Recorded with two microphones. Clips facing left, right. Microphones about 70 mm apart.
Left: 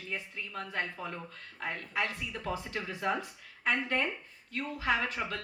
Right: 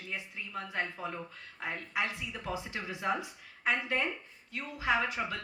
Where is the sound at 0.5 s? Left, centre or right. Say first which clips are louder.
Even; right.